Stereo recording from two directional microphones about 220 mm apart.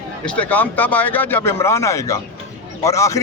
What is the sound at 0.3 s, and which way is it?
Speech, 5° left (ahead or behind).